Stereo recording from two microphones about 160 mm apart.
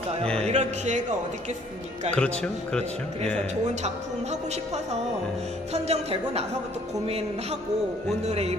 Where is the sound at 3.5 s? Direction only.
45° right (ahead or behind).